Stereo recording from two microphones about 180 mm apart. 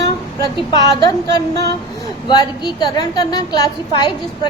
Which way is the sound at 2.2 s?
25° left (ahead or behind).